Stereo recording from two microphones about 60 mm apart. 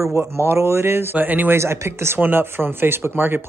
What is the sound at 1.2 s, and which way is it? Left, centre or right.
Speech, right.